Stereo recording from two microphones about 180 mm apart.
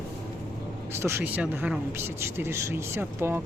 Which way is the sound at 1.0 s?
10° right (ahead or behind).